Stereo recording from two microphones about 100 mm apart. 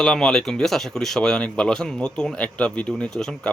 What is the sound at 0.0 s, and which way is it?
Speech, 10° left (ahead or behind).